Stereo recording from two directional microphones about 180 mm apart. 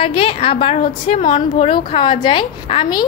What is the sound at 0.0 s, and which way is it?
A woman's voice, 30° left (ahead or behind).